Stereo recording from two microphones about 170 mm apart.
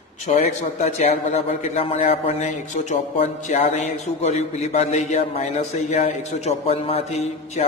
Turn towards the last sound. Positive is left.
turn(degrees=40)  # may be behind; listen again after turning